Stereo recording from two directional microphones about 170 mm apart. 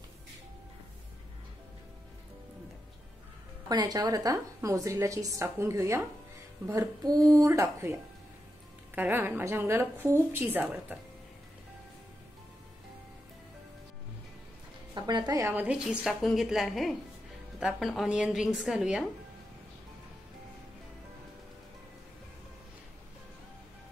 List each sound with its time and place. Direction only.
3.6 s a woman's voice: 25° right (ahead or behind)
15.0 s a woman's voice: 25° right (ahead or behind)
15.4 s a woman's voice: 10° right (ahead or behind)